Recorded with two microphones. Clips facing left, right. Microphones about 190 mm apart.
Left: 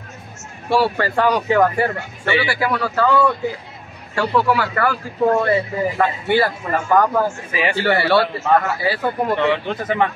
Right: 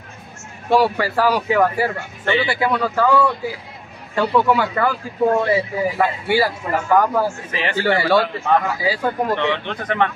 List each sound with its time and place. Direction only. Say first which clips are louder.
0.7 s a man's voice: right 1 dB; 15° right (ahead or behind)
2.4 s a man's voice: right 1 dB; 20° right (ahead or behind)
4.1 s speech: right 1 dB; 20° right (ahead or behind)
5.4 s a man's voice: even; 10° right (ahead or behind)
7.2 s speech: left 2 dB; 10° left (ahead or behind)
8.0 s a man's voice: even; 15° right (ahead or behind)
9.3 s speech: left 2 dB; 10° left (ahead or behind)